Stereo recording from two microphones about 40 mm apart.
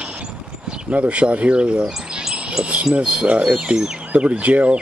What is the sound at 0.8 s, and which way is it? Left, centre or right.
Speech, right.